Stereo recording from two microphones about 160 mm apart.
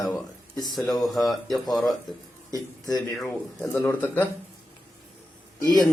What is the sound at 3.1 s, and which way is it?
Speech, 5° left (ahead or behind).